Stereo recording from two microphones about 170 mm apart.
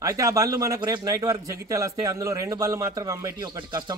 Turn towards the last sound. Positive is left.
turn(degrees=-25)  # may be behind; listen again after turning